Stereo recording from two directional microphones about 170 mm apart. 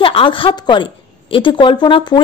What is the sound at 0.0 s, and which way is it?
A woman's voice, 30° left (ahead or behind).